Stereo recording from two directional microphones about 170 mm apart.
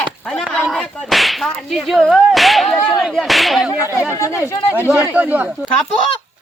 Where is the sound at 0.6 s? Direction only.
Centre (ahead or behind).